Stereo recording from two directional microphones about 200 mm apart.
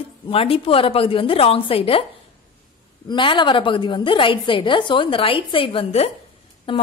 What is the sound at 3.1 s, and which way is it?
A woman's voice, 25° left (ahead or behind).